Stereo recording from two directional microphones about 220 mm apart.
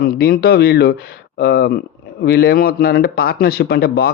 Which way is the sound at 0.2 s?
45° left (ahead or behind).